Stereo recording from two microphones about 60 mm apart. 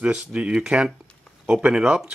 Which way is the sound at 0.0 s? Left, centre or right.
Centre.